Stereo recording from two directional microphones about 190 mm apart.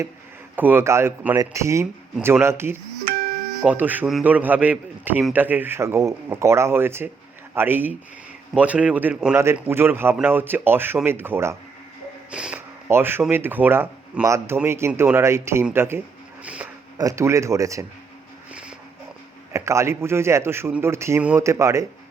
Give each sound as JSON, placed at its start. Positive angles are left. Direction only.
{"t": 0.5, "sound": "speech", "side_deg": -10}
{"t": 3.0, "sound": "music", "side_deg": -50}
{"t": 3.6, "sound": "speech", "side_deg": -10}
{"t": 19.5, "sound": "speech", "side_deg": -15}